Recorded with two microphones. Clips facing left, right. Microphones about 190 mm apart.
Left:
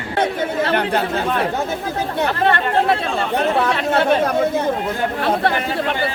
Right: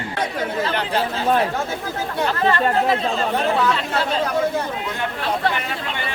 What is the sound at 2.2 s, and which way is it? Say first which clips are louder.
Speech: right 1 dB; 65° left (ahead or behind).